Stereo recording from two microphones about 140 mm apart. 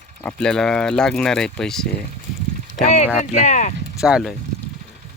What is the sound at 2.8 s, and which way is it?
Speech, 50° left (ahead or behind).